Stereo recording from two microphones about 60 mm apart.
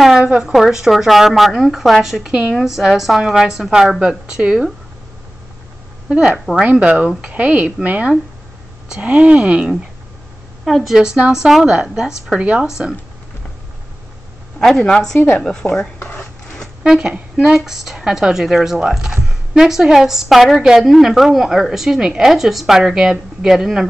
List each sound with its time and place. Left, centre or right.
0.2 s speech: centre
4.3 s speech: right
6.0 s speech: centre
10.9 s speech: centre
12.6 s speech: centre
14.6 s a woman's voice: centre
16.8 s a woman's voice: centre